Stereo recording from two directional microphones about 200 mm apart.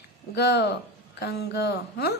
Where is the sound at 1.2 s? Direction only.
55° left (ahead or behind).